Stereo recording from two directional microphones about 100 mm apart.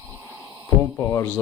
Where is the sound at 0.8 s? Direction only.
25° left (ahead or behind).